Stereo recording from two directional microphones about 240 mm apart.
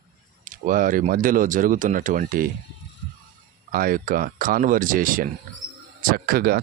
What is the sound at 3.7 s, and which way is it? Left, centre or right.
Speech, right.